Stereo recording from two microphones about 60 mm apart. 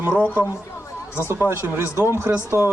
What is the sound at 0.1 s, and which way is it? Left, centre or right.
Speech, right.